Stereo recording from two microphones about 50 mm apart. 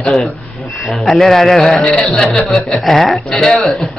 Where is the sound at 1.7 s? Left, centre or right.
Centre.